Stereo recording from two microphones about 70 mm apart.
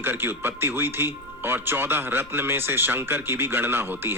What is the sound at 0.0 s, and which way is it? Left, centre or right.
Speech, right.